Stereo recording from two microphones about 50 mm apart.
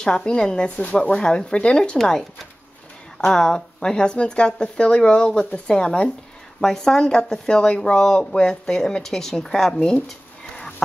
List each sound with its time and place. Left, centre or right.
0.0 s speech: centre
3.2 s speech: centre